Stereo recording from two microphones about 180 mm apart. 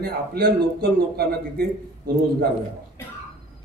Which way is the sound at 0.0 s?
60° right (ahead or behind).